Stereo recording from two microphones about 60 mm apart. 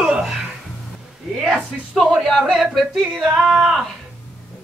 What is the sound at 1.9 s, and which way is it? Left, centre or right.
A woman's voice, centre.